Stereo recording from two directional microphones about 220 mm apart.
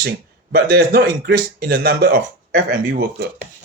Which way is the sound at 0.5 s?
45° right (ahead or behind).